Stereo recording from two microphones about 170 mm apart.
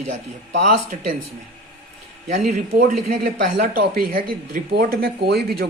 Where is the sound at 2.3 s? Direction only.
45° right (ahead or behind).